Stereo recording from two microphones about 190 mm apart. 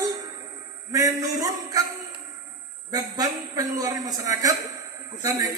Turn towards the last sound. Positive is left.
turn(degrees=-20)  # may be behind; listen again after turning